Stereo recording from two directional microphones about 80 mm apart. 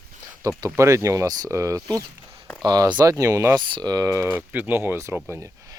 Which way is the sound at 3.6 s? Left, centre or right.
Right.